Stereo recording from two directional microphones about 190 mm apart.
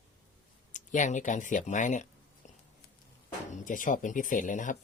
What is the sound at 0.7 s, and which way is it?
Speech, 40° left (ahead or behind).